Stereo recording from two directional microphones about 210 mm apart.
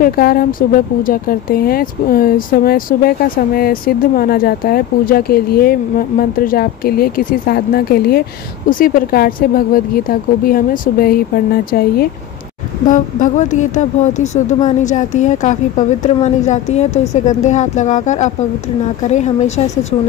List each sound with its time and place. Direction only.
0.0 s speech: 45° left (ahead or behind)